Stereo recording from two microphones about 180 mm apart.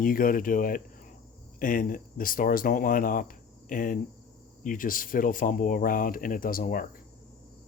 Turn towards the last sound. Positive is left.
turn(degrees=50)  # may be behind; listen again after turning